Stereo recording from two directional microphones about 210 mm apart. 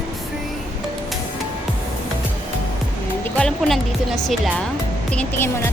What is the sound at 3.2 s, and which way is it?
Speech, 5° left (ahead or behind).